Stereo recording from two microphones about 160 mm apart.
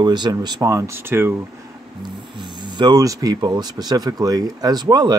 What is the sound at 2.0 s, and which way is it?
Speech, 30° right (ahead or behind).